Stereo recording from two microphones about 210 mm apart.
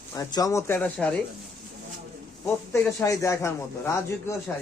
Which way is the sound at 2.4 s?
10° left (ahead or behind).